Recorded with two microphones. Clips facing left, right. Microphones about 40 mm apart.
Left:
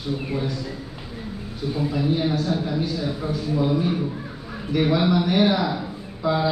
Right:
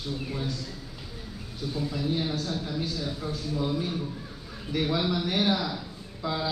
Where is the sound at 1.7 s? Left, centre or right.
Left.